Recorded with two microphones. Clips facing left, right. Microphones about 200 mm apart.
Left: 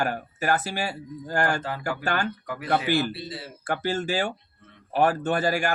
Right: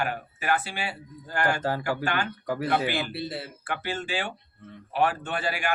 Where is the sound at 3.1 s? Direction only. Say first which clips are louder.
Right 4 dB; 60° right (ahead or behind).